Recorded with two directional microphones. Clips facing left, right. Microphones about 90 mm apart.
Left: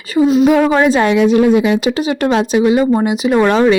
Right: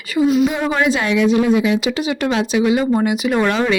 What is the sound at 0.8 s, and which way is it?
Speech, 40° left (ahead or behind).